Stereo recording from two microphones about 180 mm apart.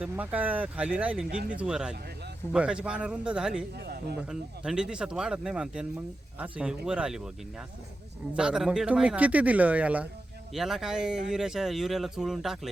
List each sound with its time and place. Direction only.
0.0 s speech: 10° right (ahead or behind)
3.8 s speech: 60° right (ahead or behind)
4.3 s speech: 5° right (ahead or behind)
8.3 s speech: 5° right (ahead or behind)